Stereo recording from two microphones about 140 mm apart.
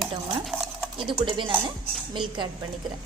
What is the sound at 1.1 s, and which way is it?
Speech, 35° right (ahead or behind).